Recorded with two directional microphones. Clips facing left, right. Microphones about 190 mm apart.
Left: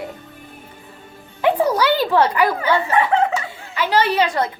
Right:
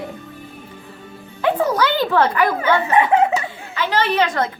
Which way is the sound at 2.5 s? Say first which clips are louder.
Right 1 dB; 20° right (ahead or behind).